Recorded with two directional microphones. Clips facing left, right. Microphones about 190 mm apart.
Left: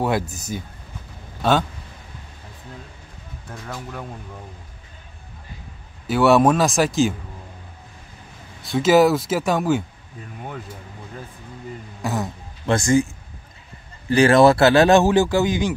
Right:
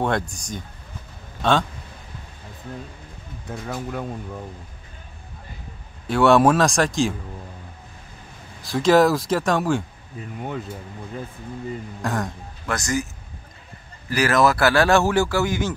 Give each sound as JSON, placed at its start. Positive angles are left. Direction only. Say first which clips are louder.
{"t": 0.0, "sound": "speech", "louder": "left 1 dB", "side_deg": 5}
{"t": 6.0, "sound": "speech", "louder": "even", "side_deg": 5}
{"t": 8.6, "sound": "speech", "louder": "left 1 dB", "side_deg": 0}
{"t": 12.0, "sound": "speech", "louder": "left 1 dB", "side_deg": 5}
{"t": 12.6, "sound": "speech", "louder": "left 7 dB", "side_deg": 30}